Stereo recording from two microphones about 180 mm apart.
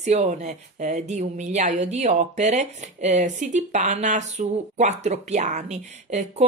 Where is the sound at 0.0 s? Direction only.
40° right (ahead or behind).